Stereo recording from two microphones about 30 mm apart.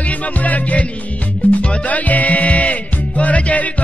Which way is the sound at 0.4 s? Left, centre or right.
Left.